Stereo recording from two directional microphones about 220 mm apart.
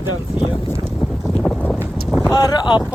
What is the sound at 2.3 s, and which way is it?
Speech, 15° left (ahead or behind).